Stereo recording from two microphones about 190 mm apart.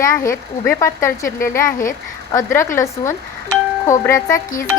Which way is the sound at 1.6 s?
45° left (ahead or behind).